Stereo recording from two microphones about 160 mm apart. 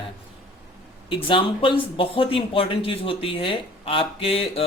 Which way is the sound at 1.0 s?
35° left (ahead or behind).